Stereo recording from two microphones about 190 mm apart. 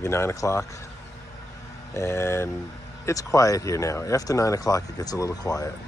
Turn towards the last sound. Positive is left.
turn(degrees=20)  # may be behind; listen again after turning